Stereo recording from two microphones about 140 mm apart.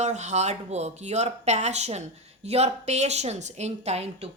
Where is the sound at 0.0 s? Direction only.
55° right (ahead or behind).